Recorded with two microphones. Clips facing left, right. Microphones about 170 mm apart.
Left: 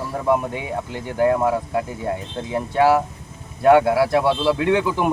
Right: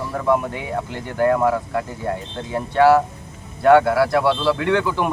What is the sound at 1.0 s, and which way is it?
Speech, 15° left (ahead or behind).